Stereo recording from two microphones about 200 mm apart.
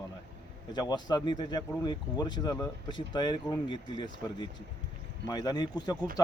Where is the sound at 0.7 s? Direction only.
20° left (ahead or behind).